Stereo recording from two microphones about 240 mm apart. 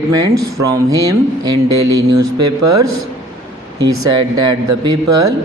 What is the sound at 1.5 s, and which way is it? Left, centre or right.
Speech, right.